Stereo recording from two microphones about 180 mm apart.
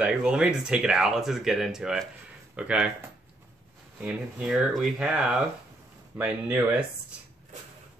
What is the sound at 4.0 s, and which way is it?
Speech, 5° right (ahead or behind).